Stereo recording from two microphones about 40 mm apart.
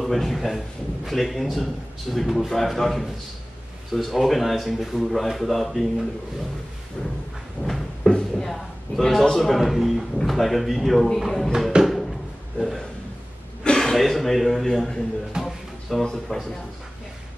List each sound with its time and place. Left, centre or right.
0.0 s a man's voice: centre
7.0 s speech: centre
7.6 s a sound: centre
8.1 s a man's voice: centre
11.7 s a sound: right
12.5 s a man's voice: centre
15.3 s music: centre
16.0 s speech: centre